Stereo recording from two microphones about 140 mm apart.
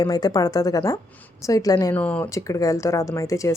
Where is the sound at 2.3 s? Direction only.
25° left (ahead or behind).